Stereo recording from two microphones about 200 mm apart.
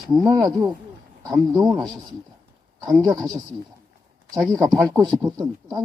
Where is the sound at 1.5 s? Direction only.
5° right (ahead or behind).